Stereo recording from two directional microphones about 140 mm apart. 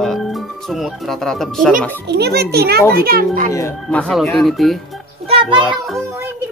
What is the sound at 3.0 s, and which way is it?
Speech, 90° right.